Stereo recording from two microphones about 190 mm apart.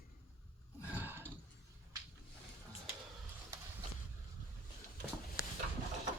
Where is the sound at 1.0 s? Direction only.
10° right (ahead or behind).